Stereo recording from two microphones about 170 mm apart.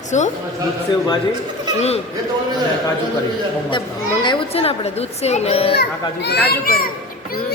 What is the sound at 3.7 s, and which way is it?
A woman's voice, 30° left (ahead or behind).